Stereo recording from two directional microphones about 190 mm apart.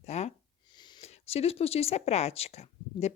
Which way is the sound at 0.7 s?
25° left (ahead or behind).